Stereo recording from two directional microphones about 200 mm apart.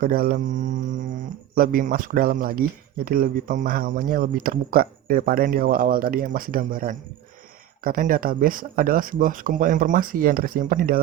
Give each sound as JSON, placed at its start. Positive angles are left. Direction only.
{"t": 0.0, "sound": "speech", "side_deg": -45}